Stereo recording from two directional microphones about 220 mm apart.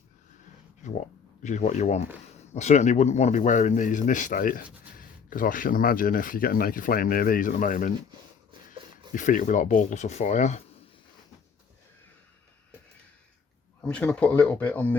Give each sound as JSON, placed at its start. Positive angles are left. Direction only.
{"t": 0.9, "sound": "speech", "side_deg": 35}
{"t": 9.1, "sound": "speech", "side_deg": 35}
{"t": 13.8, "sound": "speech", "side_deg": 5}